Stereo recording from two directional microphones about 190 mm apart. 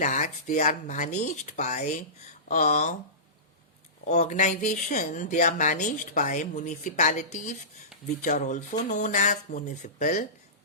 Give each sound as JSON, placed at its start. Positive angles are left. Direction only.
{"t": 0.0, "sound": "speech", "side_deg": 40}
{"t": 4.0, "sound": "speech", "side_deg": 40}